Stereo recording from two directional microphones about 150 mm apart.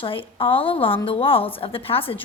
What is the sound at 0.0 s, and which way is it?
A woman's voice, 35° left (ahead or behind).